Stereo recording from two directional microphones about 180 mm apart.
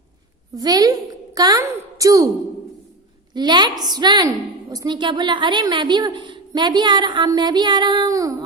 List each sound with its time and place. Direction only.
0.5 s a woman's voice: 20° right (ahead or behind)
3.3 s a woman's voice: 25° right (ahead or behind)